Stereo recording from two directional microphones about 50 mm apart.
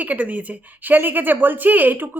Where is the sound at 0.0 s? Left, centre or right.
Right.